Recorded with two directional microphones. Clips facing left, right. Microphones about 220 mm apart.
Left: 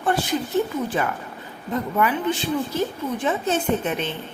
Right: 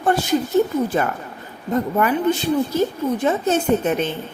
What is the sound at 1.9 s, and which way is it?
A woman's voice, 45° right (ahead or behind).